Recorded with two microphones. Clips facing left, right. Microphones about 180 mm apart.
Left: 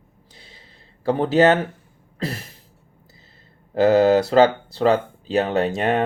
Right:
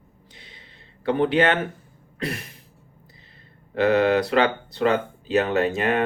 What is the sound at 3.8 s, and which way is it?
Speech, 30° left (ahead or behind).